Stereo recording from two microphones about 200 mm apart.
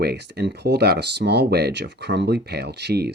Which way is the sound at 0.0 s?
55° right (ahead or behind).